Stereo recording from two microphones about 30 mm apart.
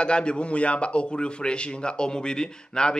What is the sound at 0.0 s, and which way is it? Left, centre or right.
A man's voice, left.